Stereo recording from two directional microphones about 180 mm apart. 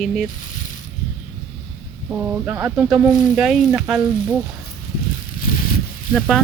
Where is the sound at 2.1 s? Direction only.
10° right (ahead or behind).